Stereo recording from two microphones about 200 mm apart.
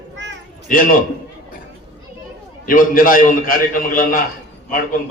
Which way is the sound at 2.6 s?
45° left (ahead or behind).